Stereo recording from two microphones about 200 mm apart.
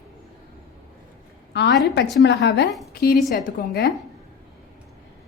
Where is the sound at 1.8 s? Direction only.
55° left (ahead or behind).